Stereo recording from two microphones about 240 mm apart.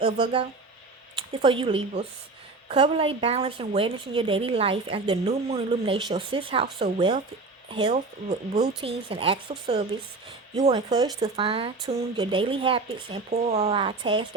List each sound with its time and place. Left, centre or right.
0.0 s a woman's voice: right
11.2 s a woman's voice: right